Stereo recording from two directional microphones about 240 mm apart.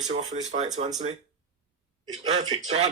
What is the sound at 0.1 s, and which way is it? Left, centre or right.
Speech, right.